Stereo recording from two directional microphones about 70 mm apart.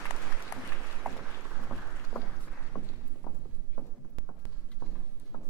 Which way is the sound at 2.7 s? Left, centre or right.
Left.